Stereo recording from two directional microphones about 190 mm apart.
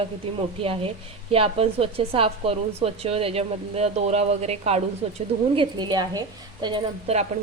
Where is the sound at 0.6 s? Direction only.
30° right (ahead or behind).